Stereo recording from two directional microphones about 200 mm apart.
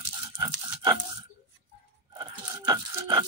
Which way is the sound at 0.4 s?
20° right (ahead or behind).